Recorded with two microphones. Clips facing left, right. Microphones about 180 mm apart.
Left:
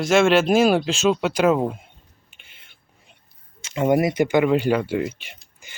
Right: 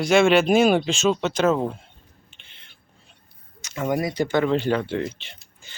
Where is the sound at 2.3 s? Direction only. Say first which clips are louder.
Right 1 dB; 5° left (ahead or behind).